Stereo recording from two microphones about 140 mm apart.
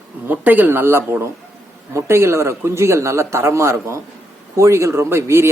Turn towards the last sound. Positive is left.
turn(degrees=-20)  # may be behind; listen again after turning